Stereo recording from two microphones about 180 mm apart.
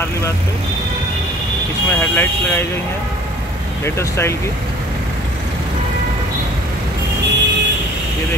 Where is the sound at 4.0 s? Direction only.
15° left (ahead or behind).